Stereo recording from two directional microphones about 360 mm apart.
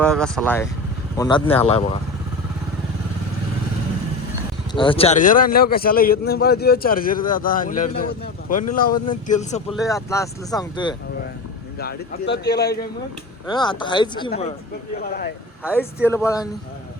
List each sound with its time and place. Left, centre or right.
0.0 s speech: centre
4.7 s a man's voice: centre
9.6 s speech: centre
11.8 s a man's voice: left
13.5 s a man's voice: centre
15.6 s speech: centre